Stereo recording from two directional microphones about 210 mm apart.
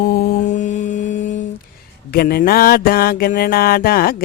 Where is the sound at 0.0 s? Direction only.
40° left (ahead or behind).